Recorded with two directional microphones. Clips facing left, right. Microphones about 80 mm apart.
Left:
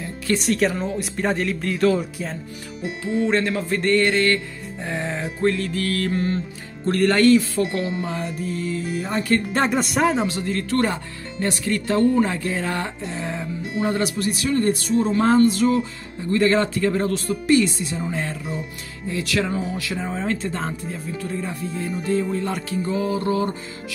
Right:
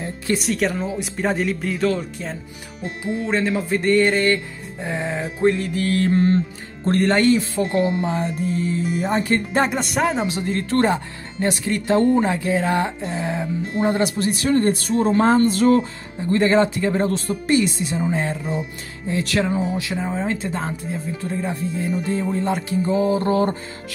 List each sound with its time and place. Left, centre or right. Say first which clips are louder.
0.4 s speech: left 1 dB; centre
5.5 s music: right 3 dB; centre
6.9 s music: left 1 dB; right
9.6 s speech: even; centre
10.2 s music: right 1 dB; right
12.2 s speech: right 2 dB; centre
13.7 s speech: right 2 dB; right
16.3 s music: right 2 dB; right
19.0 s speech: right 2 dB; right
19.4 s music: right 3 dB; right
20.0 s speech: right 1 dB; centre
21.2 s music: right 2 dB; right